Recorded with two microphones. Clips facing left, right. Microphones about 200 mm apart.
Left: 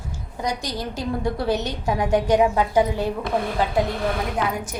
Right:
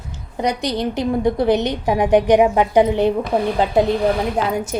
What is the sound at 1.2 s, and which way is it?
A woman's voice, 20° right (ahead or behind).